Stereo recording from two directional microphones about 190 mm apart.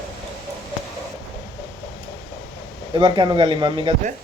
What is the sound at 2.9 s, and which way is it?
Speech, 25° right (ahead or behind).